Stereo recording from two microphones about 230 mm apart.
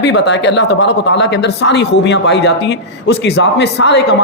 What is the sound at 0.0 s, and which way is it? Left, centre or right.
A man's voice, left.